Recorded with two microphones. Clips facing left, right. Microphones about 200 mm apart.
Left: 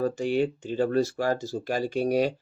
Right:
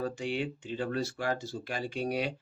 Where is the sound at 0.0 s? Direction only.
40° left (ahead or behind).